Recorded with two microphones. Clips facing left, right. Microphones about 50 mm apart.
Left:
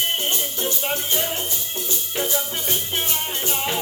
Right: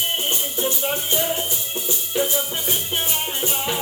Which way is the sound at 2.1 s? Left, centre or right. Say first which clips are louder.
Right 3 dB; centre.